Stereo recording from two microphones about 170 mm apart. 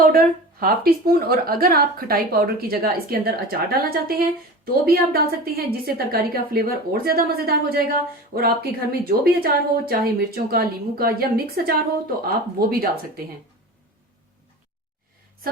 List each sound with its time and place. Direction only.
0.0 s a woman's voice: 60° right (ahead or behind)